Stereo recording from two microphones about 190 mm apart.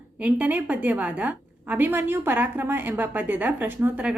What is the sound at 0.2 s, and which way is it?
A woman's voice, 5° right (ahead or behind).